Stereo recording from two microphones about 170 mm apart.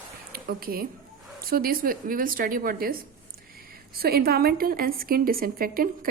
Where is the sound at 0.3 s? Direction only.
60° right (ahead or behind).